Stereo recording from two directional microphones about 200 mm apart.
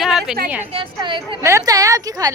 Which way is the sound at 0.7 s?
25° right (ahead or behind).